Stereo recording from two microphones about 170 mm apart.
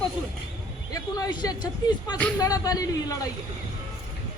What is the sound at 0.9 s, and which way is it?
Speech, 25° left (ahead or behind).